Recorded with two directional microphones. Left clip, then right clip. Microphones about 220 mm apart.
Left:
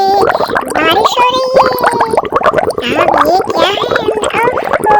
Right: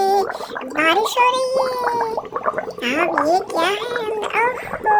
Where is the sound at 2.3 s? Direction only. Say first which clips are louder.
Left 13 dB; 45° left (ahead or behind).